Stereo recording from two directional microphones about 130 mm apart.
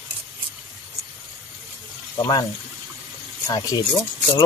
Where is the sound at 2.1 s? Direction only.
35° left (ahead or behind).